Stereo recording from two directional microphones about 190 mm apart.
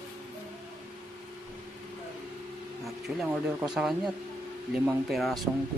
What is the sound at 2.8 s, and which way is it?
Speech, centre (ahead or behind).